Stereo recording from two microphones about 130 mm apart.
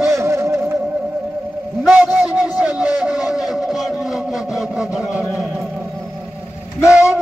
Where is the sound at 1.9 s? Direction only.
15° right (ahead or behind).